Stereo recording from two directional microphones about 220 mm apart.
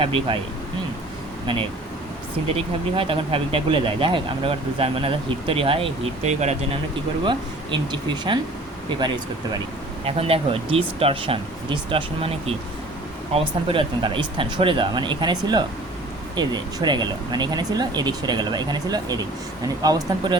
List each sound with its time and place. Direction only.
0.0 s speech: 25° right (ahead or behind)
2.6 s speech: 25° right (ahead or behind)
7.3 s speech: 20° right (ahead or behind)